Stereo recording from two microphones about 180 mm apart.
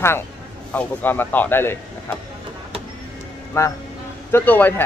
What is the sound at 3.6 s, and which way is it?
Speech, 15° left (ahead or behind).